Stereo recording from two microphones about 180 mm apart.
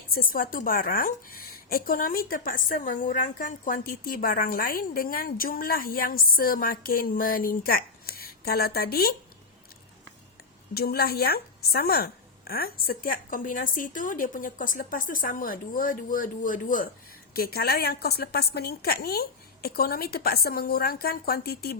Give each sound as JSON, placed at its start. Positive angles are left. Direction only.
{"t": 0.1, "sound": "a woman's voice", "side_deg": 55}
{"t": 10.8, "sound": "a woman's voice", "side_deg": 60}